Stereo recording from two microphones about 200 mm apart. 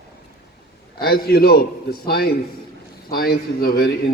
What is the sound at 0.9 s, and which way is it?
Speech, 50° left (ahead or behind).